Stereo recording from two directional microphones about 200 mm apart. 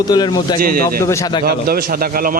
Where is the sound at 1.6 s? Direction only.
50° right (ahead or behind).